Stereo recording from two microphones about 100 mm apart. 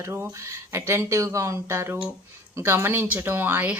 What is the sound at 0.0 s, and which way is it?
Speech, 25° right (ahead or behind).